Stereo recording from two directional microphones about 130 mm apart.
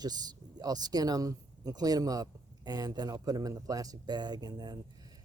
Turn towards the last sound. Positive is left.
turn(degrees=-30)  # may be behind; listen again after turning